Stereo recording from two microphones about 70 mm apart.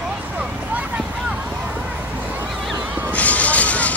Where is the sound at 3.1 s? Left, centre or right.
Left.